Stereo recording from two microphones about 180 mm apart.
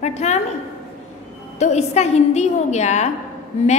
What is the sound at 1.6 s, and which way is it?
A woman's voice, 40° left (ahead or behind).